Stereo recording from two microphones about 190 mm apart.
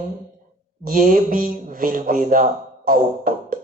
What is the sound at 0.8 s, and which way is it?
Speech, 45° right (ahead or behind).